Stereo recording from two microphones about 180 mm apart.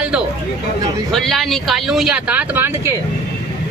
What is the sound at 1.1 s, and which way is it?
Speech, centre (ahead or behind).